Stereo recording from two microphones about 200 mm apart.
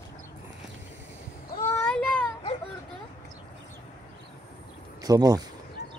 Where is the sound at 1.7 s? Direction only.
5° left (ahead or behind).